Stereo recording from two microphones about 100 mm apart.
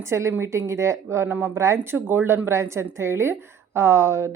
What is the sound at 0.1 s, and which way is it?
Speech, 25° right (ahead or behind).